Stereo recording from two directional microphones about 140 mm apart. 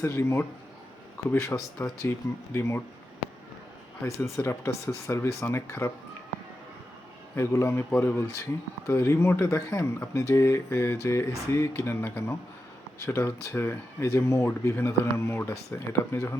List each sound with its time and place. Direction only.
0.0 s speech: 20° left (ahead or behind)
4.0 s speech: 20° left (ahead or behind)
7.3 s speech: 20° left (ahead or behind)